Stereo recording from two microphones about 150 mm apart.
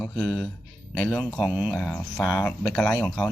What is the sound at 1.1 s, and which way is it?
Speech, 5° right (ahead or behind).